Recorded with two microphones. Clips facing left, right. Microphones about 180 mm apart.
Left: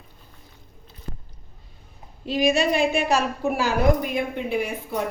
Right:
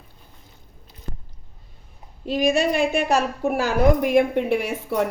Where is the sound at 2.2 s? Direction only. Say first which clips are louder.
Right 1 dB; 55° right (ahead or behind).